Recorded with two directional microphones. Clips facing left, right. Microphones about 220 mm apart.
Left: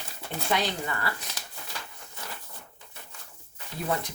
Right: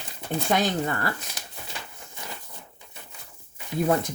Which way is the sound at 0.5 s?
45° right (ahead or behind).